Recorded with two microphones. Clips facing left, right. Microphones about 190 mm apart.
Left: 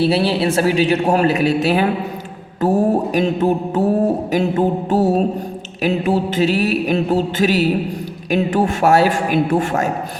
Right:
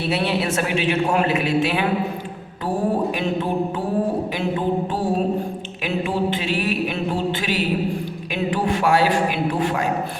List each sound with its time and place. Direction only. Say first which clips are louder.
0.0 s a man's voice: left 6 dB; 30° left (ahead or behind)